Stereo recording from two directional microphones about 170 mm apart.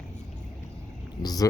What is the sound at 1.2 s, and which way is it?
Speech, 20° left (ahead or behind).